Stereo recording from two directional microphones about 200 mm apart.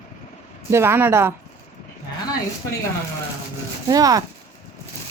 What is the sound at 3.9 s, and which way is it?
Speech, 20° right (ahead or behind).